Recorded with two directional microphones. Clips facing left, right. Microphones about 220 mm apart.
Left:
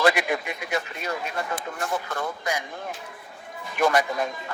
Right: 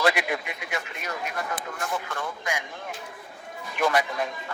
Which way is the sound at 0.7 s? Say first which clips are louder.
Left 5 dB; 35° left (ahead or behind).